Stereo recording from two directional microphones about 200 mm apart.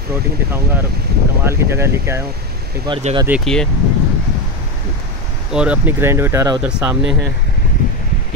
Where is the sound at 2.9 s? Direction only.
30° right (ahead or behind).